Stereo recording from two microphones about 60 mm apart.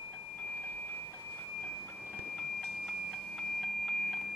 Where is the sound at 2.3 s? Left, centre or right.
Centre.